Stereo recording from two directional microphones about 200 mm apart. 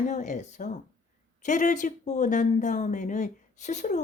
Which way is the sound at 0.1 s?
35° left (ahead or behind).